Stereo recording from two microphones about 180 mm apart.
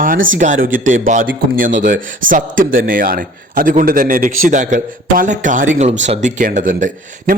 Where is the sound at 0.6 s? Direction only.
50° right (ahead or behind).